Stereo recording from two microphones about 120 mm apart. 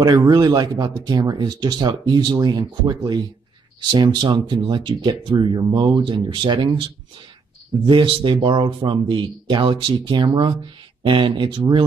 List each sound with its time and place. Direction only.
0.0 s speech: 35° right (ahead or behind)
3.9 s speech: 40° right (ahead or behind)